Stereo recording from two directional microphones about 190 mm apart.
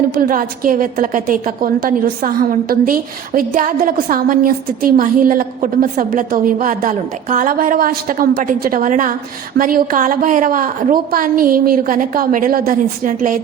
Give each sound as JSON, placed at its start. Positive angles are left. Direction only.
{"t": 0.1, "sound": "a woman's voice", "side_deg": -45}